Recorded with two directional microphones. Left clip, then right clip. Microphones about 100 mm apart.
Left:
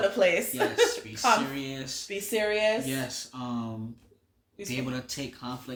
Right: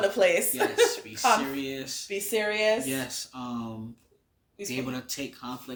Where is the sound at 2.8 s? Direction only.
5° left (ahead or behind).